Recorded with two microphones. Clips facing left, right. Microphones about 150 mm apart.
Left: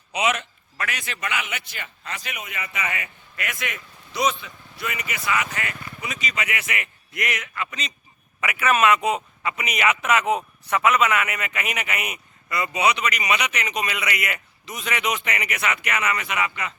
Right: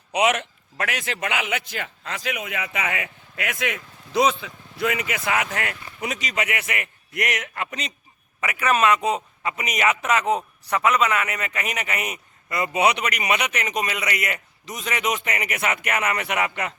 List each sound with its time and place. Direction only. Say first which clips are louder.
0.1 s a man's voice: right 3 dB; 65° right (ahead or behind); by 5.5 s 85° right
5.5 s speech: right 3 dB; 70° right (ahead or behind); by 7.3 s 50° right (ahead or behind)
7.3 s a man's voice: left 1 dB; 65° right (ahead or behind)
8.4 s a man's voice: even; 35° right (ahead or behind); by 16.7 s 55° right (ahead or behind)